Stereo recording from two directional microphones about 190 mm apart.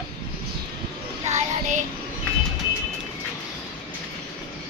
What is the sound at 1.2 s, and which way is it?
Child singing, 35° right (ahead or behind).